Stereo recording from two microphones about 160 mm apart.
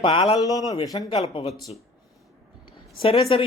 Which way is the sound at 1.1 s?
40° left (ahead or behind).